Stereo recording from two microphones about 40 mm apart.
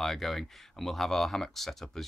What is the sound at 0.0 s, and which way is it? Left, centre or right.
Speech, centre.